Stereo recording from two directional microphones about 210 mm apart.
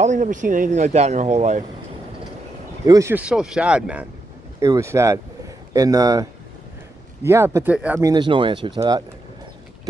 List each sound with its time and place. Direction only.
0.0 s speech: 35° right (ahead or behind)
2.8 s speech: 15° right (ahead or behind)
7.2 s speech: 15° right (ahead or behind)
8.1 s speech: 20° right (ahead or behind)